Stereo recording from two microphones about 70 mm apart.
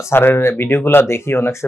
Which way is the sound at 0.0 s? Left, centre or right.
Left.